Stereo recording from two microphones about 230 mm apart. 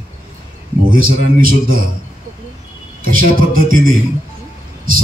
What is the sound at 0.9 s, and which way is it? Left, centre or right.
Speech, right.